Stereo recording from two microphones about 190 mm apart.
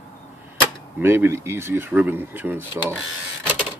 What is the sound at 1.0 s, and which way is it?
Speech, 10° right (ahead or behind).